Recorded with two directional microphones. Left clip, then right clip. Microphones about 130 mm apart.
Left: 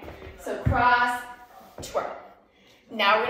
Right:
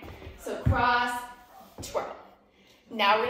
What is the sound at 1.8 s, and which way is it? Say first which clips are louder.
Speech: left 3 dB; 5° left (ahead or behind).